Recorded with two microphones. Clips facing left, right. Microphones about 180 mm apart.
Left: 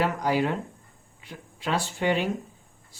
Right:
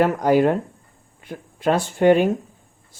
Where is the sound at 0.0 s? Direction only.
50° right (ahead or behind).